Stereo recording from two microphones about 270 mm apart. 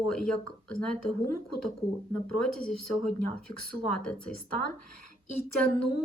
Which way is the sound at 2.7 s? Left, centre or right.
Left.